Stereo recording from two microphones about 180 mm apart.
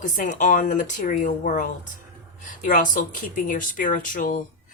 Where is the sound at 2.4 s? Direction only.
45° left (ahead or behind).